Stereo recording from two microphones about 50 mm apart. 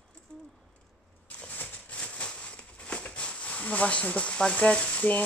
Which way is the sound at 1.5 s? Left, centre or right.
Left.